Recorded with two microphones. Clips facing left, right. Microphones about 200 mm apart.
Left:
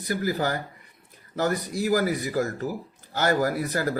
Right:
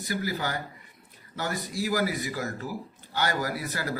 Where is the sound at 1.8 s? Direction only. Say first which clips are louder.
Left 4 dB; 45° left (ahead or behind).